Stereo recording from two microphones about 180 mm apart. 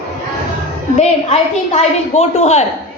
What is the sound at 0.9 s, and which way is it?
A woman's voice, 35° left (ahead or behind).